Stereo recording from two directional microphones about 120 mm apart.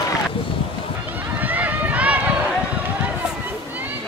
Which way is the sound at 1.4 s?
15° right (ahead or behind).